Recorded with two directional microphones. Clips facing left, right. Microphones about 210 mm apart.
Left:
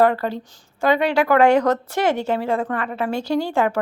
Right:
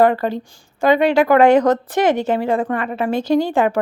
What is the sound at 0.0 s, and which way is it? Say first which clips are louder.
A woman's voice: right 3 dB; 15° right (ahead or behind).